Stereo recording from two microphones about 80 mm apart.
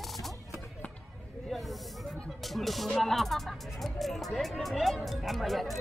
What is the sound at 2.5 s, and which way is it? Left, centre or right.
Speech, centre.